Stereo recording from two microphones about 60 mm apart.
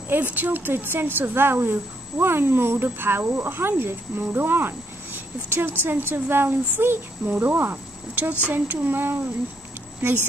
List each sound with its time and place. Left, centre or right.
0.1 s a woman's voice: right